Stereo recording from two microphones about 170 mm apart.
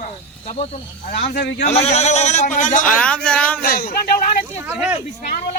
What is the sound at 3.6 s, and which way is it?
Speech, 60° left (ahead or behind).